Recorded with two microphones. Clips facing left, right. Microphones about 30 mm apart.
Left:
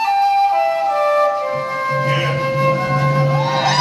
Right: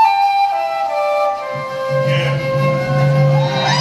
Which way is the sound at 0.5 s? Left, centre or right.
Centre.